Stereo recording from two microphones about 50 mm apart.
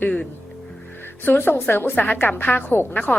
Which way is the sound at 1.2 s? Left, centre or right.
Left.